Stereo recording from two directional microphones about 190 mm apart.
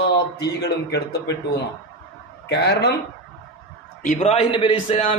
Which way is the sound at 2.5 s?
60° left (ahead or behind).